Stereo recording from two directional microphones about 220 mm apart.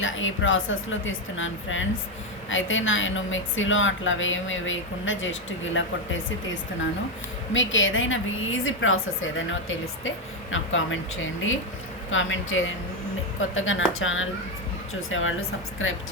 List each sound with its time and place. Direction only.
0.0 s a woman's voice: 60° left (ahead or behind)